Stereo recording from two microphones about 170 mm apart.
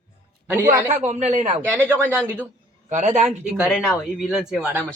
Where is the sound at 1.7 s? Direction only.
10° right (ahead or behind).